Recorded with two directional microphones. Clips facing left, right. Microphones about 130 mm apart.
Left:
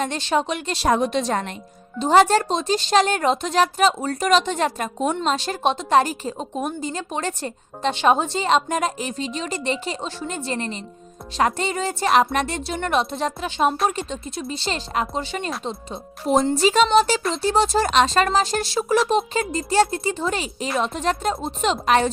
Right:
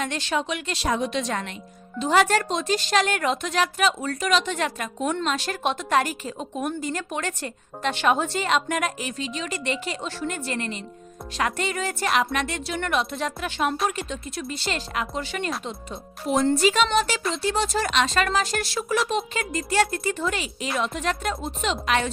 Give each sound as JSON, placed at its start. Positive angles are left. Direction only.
{"t": 0.0, "sound": "speech", "side_deg": 30}
{"t": 0.9, "sound": "a woman's voice", "side_deg": 45}